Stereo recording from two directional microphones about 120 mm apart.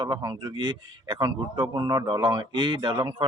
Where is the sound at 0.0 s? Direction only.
40° right (ahead or behind).